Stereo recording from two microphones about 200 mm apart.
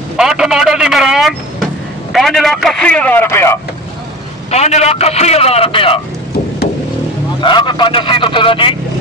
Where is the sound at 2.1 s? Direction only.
Centre (ahead or behind).